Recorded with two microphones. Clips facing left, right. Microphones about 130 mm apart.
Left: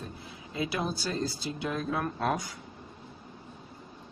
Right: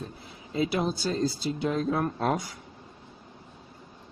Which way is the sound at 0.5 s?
30° right (ahead or behind).